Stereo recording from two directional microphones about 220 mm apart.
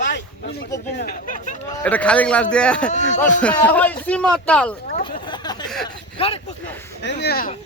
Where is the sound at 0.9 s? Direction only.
40° left (ahead or behind).